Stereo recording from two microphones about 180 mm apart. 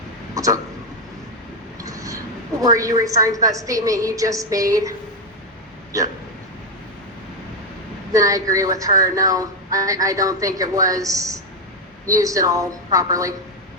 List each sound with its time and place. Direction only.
0.3 s a sound: 20° right (ahead or behind)
1.8 s a woman's voice: 20° right (ahead or behind)
8.1 s a woman's voice: 20° right (ahead or behind)